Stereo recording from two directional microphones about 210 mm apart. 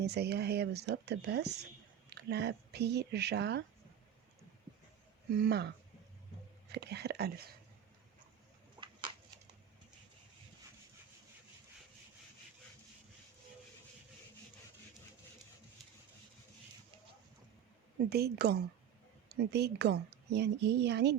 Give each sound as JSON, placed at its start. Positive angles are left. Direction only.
{"t": 0.0, "sound": "a woman's voice", "side_deg": -50}
{"t": 5.4, "sound": "a woman's voice", "side_deg": -50}
{"t": 8.8, "sound": "a sound", "side_deg": -20}
{"t": 18.1, "sound": "a woman's voice", "side_deg": -50}